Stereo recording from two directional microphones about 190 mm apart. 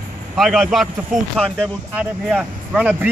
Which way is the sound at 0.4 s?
Centre (ahead or behind).